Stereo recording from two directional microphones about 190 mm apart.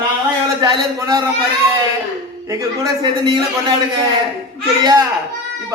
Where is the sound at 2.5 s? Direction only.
25° right (ahead or behind).